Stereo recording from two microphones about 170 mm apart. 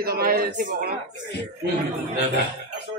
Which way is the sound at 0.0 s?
60° right (ahead or behind).